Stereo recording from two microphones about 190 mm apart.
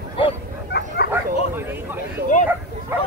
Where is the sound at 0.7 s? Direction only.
60° left (ahead or behind).